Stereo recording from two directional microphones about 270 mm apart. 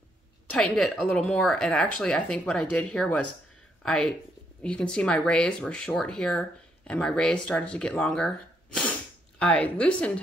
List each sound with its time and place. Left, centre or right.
0.5 s speech: centre